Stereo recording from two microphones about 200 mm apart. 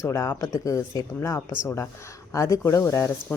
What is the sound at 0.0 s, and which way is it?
Speech, 15° left (ahead or behind).